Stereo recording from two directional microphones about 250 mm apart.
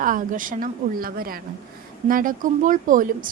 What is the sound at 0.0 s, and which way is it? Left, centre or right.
A woman's voice, right.